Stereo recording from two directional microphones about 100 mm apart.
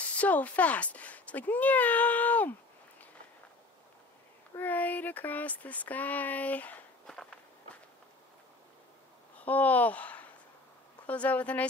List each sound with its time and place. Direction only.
0.2 s speech: 15° left (ahead or behind)
4.6 s speech: 15° left (ahead or behind)
9.4 s speech: 15° left (ahead or behind)